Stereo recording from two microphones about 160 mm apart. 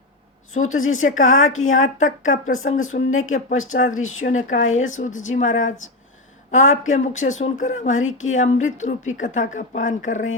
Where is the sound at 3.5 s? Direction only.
55° left (ahead or behind).